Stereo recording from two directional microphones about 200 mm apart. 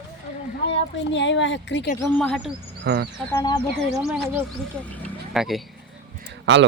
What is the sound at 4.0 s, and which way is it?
Speech, centre (ahead or behind).